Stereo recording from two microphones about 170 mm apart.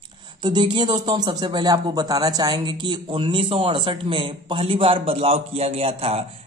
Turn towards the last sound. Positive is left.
turn(degrees=-35)  # may be behind; listen again after turning